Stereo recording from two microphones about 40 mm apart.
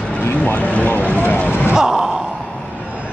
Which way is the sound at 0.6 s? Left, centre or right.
Left.